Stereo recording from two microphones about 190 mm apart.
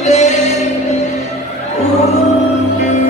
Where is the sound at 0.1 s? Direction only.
35° left (ahead or behind).